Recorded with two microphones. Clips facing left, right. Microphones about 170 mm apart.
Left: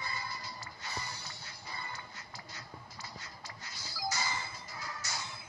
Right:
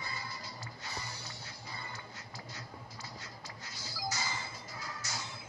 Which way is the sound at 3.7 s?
60° left (ahead or behind).